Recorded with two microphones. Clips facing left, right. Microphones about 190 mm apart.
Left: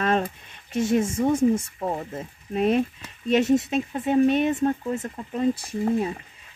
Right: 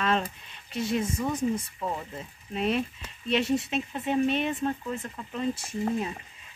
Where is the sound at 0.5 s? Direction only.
50° left (ahead or behind).